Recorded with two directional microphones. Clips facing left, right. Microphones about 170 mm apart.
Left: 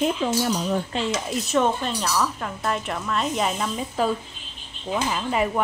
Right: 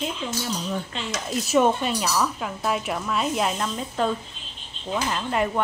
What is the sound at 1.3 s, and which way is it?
Speech, centre (ahead or behind).